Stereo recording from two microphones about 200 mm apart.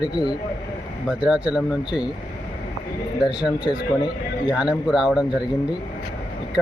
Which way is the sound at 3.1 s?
5° right (ahead or behind).